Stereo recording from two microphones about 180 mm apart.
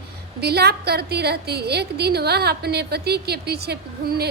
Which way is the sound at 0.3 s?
60° right (ahead or behind).